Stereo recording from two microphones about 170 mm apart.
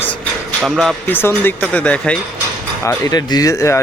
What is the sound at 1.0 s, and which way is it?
Speech, 10° left (ahead or behind).